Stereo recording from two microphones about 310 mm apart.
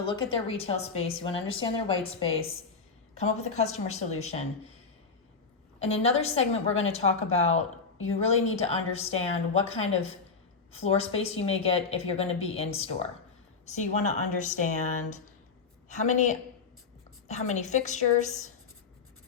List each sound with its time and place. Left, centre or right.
0.0 s a woman's voice: centre
6.0 s a woman's voice: centre